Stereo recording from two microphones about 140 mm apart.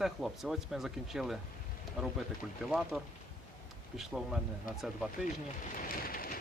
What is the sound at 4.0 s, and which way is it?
Speech, centre (ahead or behind).